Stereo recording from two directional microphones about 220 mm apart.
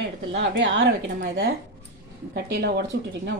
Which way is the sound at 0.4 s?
50° right (ahead or behind).